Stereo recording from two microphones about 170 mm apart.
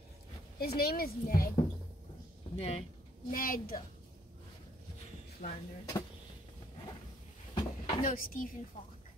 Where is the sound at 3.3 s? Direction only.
60° left (ahead or behind).